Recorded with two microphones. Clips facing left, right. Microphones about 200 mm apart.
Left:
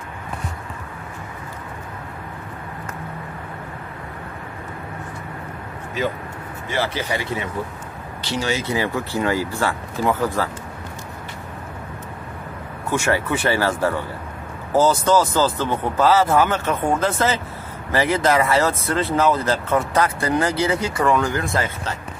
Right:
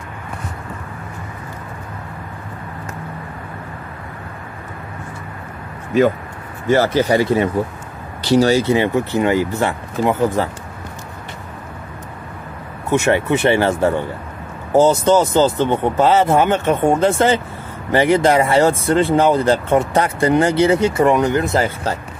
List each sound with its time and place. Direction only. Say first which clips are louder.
6.7 s speech: right 10 dB; 45° right (ahead or behind); by 10.5 s 20° right (ahead or behind)
12.9 s speech: right 6 dB; 25° right (ahead or behind)